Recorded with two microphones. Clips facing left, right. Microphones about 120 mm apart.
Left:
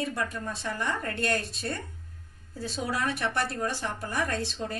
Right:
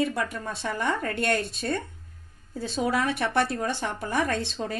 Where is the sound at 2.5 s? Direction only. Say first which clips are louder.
Right 5 dB; 55° right (ahead or behind).